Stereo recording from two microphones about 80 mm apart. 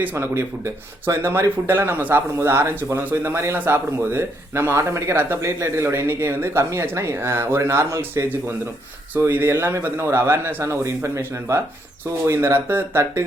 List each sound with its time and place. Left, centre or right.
0.0 s speech: right
9.1 s speech: right